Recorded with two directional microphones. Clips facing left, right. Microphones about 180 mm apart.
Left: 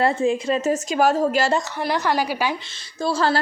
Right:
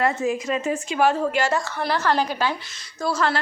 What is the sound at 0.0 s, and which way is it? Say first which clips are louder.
A woman's voice: left 3 dB; 30° left (ahead or behind).